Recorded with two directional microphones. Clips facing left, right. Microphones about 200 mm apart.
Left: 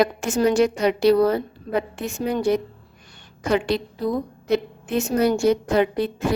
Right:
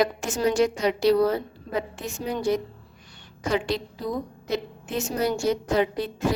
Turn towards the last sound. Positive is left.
turn(degrees=60)  # may be behind; listen again after turning